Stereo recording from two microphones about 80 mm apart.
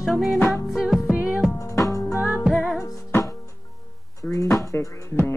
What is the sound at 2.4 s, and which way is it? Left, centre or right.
Music, centre.